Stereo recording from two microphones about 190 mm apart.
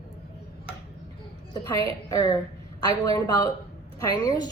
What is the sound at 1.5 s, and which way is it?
A woman's voice, 15° left (ahead or behind).